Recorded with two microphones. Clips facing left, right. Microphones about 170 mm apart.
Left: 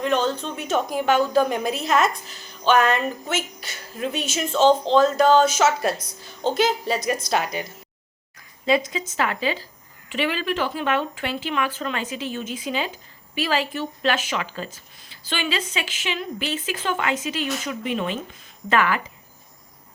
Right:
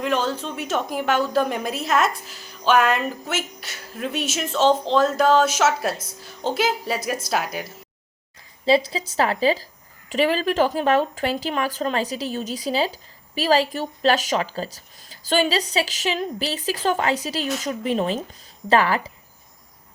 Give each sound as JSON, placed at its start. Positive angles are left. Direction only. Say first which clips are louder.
{"t": 0.0, "sound": "a woman's voice", "louder": "left 1 dB", "side_deg": -5}
{"t": 8.6, "sound": "speech", "louder": "right 2 dB", "side_deg": -30}